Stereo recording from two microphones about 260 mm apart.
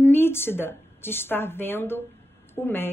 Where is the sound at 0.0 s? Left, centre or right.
Centre.